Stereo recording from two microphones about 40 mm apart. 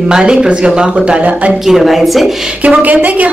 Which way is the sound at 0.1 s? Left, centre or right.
Centre.